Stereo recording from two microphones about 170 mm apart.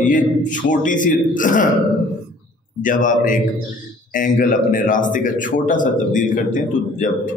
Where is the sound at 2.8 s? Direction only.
50° left (ahead or behind).